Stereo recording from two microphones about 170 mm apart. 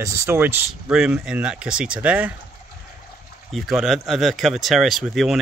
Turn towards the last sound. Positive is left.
turn(degrees=0)  # may be behind; listen again after turning